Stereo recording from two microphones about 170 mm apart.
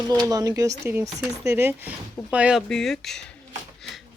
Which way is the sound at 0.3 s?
20° right (ahead or behind).